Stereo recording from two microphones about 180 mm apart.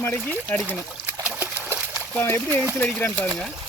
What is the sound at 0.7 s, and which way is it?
Trickle, 5° right (ahead or behind).